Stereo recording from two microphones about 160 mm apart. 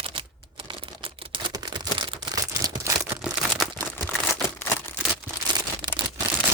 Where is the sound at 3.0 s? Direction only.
5° right (ahead or behind).